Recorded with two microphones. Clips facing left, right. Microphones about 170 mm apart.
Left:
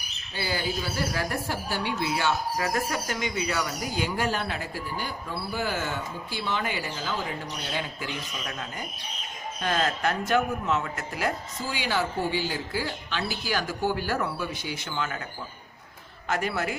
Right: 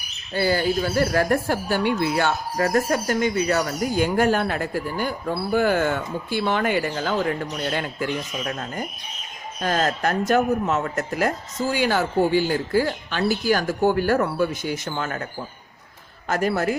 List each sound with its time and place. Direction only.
0.3 s speech: 50° right (ahead or behind)
16.3 s a man's voice: 40° right (ahead or behind)